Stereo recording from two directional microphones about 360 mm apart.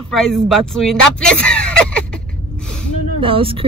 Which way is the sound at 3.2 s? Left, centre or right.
Centre.